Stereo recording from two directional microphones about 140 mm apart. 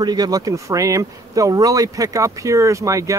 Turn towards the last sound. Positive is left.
turn(degrees=-25)  # may be behind; listen again after turning